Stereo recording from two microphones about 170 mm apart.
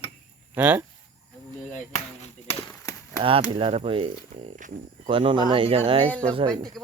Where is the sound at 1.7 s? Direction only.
40° left (ahead or behind).